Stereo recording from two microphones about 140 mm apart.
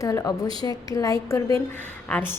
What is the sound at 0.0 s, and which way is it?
A woman's voice, 25° left (ahead or behind).